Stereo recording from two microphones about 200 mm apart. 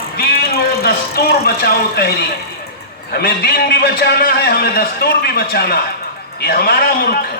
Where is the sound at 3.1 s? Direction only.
50° left (ahead or behind).